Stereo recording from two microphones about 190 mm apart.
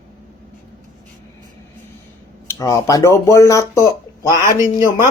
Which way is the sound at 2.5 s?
20° left (ahead or behind).